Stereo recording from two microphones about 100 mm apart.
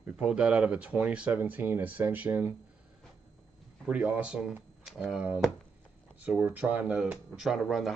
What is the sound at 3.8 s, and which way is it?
Speech, 15° right (ahead or behind).